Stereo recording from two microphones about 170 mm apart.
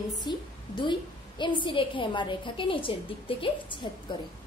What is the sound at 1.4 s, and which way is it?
A woman's voice, 30° left (ahead or behind).